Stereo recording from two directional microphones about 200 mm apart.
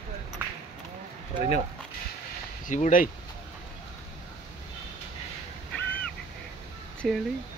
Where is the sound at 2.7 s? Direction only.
40° left (ahead or behind).